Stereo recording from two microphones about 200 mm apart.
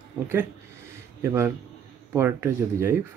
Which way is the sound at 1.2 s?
15° right (ahead or behind).